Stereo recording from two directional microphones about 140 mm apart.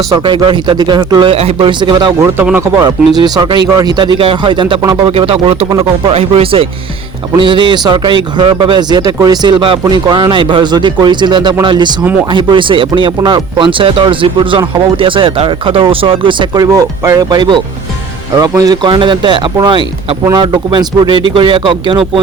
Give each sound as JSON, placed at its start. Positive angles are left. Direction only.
{"t": 0.1, "sound": "a man's voice", "side_deg": -35}
{"t": 2.4, "sound": "speech", "side_deg": -15}
{"t": 3.2, "sound": "a man's voice", "side_deg": -30}
{"t": 16.7, "sound": "a man's voice", "side_deg": -20}